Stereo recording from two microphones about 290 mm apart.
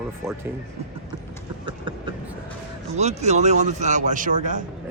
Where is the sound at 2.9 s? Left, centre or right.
Right.